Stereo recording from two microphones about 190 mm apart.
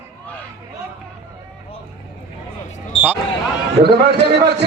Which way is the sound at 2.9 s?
25° left (ahead or behind).